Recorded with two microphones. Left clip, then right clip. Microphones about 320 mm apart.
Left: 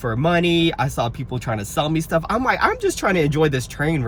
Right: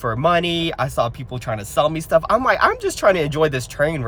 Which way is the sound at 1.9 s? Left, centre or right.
Centre.